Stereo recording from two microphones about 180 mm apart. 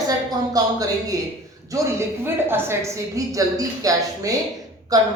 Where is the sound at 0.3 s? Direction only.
20° right (ahead or behind).